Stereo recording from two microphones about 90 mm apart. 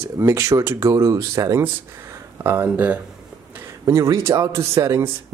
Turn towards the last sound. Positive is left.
turn(degrees=-30)  # may be behind; listen again after turning